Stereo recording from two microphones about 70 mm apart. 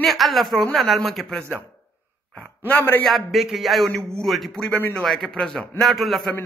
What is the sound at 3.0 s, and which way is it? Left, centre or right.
A man's voice, centre.